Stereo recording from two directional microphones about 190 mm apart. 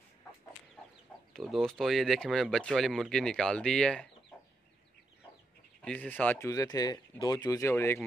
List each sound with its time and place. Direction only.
1.3 s speech: centre (ahead or behind)
5.8 s speech: 5° left (ahead or behind)